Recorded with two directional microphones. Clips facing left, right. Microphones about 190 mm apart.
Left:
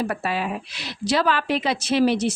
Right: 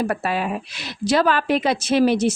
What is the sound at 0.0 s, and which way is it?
Speech, 50° right (ahead or behind).